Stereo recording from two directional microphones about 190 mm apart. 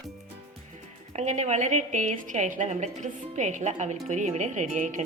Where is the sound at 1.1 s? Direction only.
40° right (ahead or behind).